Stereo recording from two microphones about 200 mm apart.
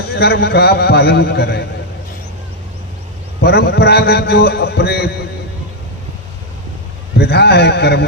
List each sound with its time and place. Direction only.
0.1 s a man's voice: 55° left (ahead or behind)
3.4 s a man's voice: 55° left (ahead or behind)
7.2 s a man's voice: 55° left (ahead or behind)